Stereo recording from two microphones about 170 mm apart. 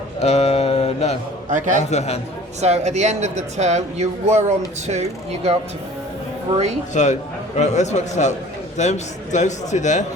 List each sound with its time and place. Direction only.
0.2 s a sound: 40° left (ahead or behind)
1.5 s speech: 45° right (ahead or behind)
1.9 s speech: 40° left (ahead or behind)
2.6 s speech: 40° right (ahead or behind)
6.9 s a man's voice: 45° left (ahead or behind)